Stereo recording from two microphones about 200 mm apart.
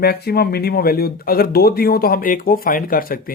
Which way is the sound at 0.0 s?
50° left (ahead or behind).